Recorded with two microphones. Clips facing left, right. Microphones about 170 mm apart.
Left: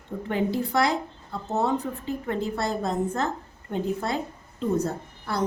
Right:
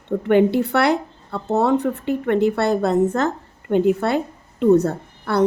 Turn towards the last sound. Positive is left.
turn(degrees=-65)  # may be behind; listen again after turning